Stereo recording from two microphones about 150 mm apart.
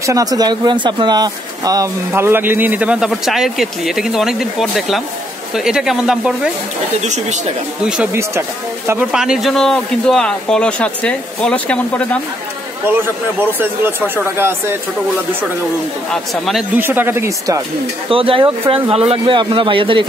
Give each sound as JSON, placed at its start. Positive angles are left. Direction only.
{"t": 0.0, "sound": "speech", "side_deg": -25}
{"t": 7.1, "sound": "speech", "side_deg": -50}
{"t": 7.8, "sound": "speech", "side_deg": -10}
{"t": 9.1, "sound": "speech", "side_deg": -5}
{"t": 13.4, "sound": "speech", "side_deg": -15}
{"t": 16.1, "sound": "speech", "side_deg": 0}
{"t": 16.7, "sound": "speech", "side_deg": -15}
{"t": 18.1, "sound": "speech", "side_deg": -35}